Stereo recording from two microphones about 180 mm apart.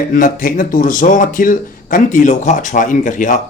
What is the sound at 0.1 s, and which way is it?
Speech, 50° left (ahead or behind).